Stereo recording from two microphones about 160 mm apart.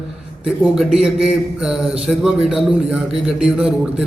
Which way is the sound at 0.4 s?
5° right (ahead or behind).